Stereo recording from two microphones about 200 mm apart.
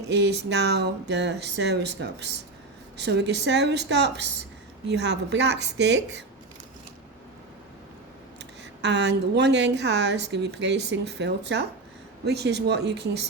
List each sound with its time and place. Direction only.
0.1 s a woman's voice: 55° right (ahead or behind)
8.8 s a woman's voice: 60° right (ahead or behind)